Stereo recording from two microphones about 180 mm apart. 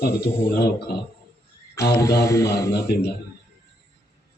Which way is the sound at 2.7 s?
65° left (ahead or behind).